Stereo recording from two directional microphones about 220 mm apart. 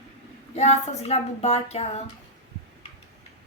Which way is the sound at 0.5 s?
30° left (ahead or behind).